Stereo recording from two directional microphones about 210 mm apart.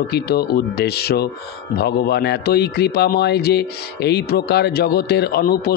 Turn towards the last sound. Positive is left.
turn(degrees=50)  # may be behind; listen again after turning